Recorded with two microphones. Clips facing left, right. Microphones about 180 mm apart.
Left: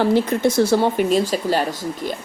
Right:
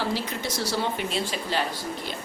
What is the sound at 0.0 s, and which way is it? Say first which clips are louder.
Speech: left 12 dB; 55° left (ahead or behind).